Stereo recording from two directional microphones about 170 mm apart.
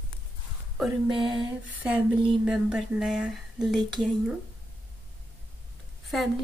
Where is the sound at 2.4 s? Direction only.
5° right (ahead or behind).